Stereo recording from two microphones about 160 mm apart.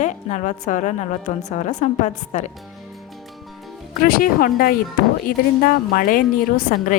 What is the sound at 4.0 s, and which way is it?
A woman's voice, 65° left (ahead or behind).